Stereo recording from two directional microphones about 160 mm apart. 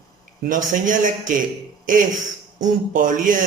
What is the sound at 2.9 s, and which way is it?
Speech, 55° right (ahead or behind).